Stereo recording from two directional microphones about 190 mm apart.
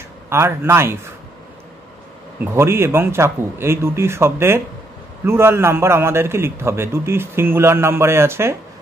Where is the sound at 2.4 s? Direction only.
15° right (ahead or behind).